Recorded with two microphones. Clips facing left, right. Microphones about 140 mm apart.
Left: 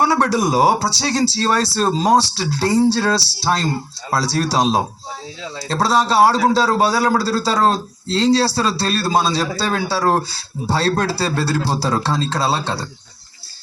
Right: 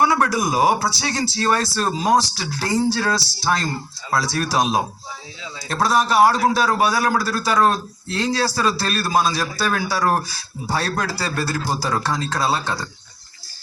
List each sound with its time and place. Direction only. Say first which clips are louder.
0.0 s a man's voice: left 2 dB; 30° left (ahead or behind)